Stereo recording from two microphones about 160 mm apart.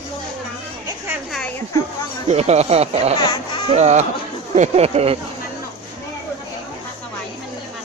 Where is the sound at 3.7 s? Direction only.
45° right (ahead or behind).